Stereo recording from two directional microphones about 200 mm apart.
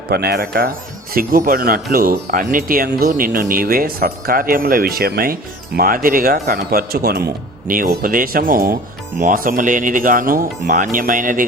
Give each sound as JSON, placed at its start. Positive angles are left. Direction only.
{"t": 0.1, "sound": "speech", "side_deg": -55}